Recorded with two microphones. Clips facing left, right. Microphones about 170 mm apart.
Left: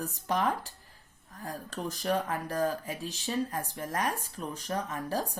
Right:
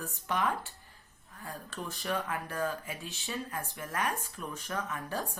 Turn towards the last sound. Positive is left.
turn(degrees=35)  # may be behind; listen again after turning